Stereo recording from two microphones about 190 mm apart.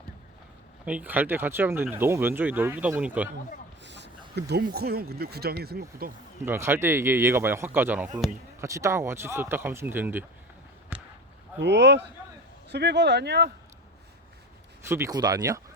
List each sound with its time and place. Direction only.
0.9 s speech: 10° right (ahead or behind)
3.8 s a sound: 65° right (ahead or behind)
4.4 s speech: 60° right (ahead or behind)
6.4 s speech: 10° right (ahead or behind)
10.9 s basketball bounce: 10° right (ahead or behind)
11.6 s speech: 65° right (ahead or behind)
14.8 s speech: 15° right (ahead or behind)